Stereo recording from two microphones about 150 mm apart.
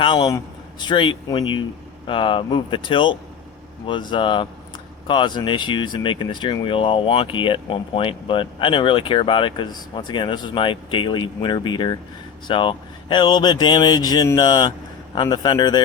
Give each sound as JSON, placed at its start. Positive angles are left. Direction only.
{"t": 0.0, "sound": "speech", "side_deg": 35}